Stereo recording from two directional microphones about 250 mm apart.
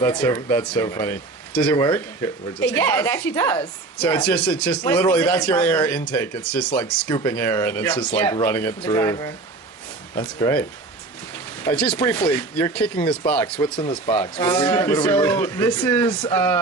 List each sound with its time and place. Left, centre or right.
0.0 s speech: centre
13.7 s speech: centre